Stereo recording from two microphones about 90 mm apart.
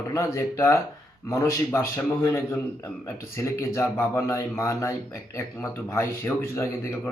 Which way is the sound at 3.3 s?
30° left (ahead or behind).